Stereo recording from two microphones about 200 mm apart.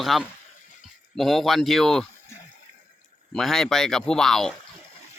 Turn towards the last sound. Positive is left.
turn(degrees=0)  # may be behind; listen again after turning